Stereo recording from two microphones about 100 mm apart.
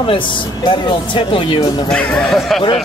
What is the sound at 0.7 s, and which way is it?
Speech, 55° left (ahead or behind).